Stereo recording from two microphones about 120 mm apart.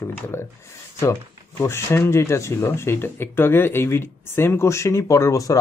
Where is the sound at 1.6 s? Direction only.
20° left (ahead or behind).